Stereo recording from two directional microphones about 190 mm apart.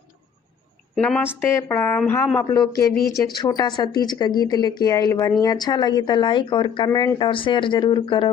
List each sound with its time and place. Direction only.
0.9 s a woman's voice: 5° left (ahead or behind); by 8.3 s 25° left (ahead or behind)